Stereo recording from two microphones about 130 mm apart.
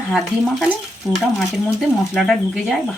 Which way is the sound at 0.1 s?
Centre (ahead or behind).